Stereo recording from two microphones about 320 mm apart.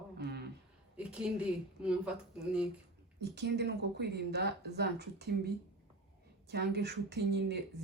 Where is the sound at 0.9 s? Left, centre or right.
Centre.